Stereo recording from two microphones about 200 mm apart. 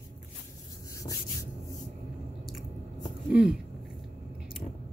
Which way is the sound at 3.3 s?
5° right (ahead or behind).